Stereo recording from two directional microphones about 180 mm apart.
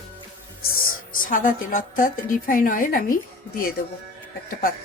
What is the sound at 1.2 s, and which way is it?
A woman's voice, 50° left (ahead or behind).